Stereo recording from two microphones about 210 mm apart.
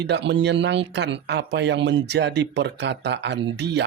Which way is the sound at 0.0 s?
55° right (ahead or behind).